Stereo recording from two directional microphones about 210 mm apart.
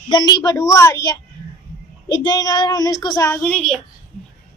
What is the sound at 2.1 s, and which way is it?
A child's voice, 20° left (ahead or behind).